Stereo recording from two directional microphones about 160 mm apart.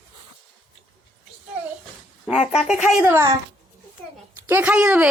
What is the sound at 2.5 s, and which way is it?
Speech, 5° right (ahead or behind).